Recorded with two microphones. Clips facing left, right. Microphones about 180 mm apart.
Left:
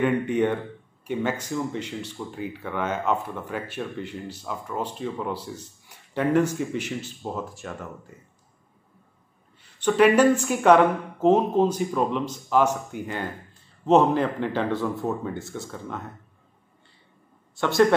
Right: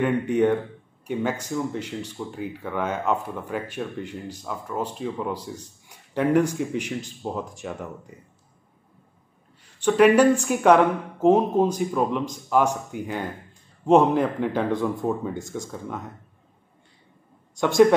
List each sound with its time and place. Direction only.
0.2 s a man's voice: 10° right (ahead or behind)
9.6 s a woman's voice: 10° right (ahead or behind)
14.7 s speech: 5° left (ahead or behind)